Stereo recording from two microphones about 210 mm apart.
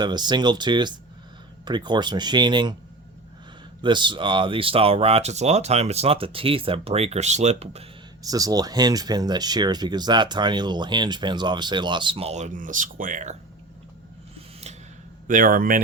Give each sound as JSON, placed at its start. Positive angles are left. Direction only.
{"t": 0.0, "sound": "speech", "side_deg": -20}
{"t": 3.8, "sound": "speech", "side_deg": -20}
{"t": 8.2, "sound": "speech", "side_deg": -15}
{"t": 15.3, "sound": "speech", "side_deg": -40}